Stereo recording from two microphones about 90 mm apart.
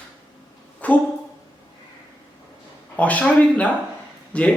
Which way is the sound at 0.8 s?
15° left (ahead or behind).